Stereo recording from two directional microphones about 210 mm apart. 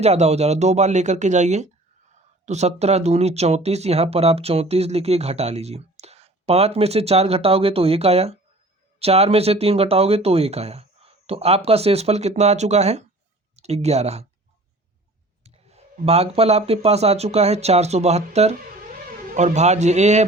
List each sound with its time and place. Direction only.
0.0 s speech: 30° right (ahead or behind)
15.4 s speech: 30° right (ahead or behind)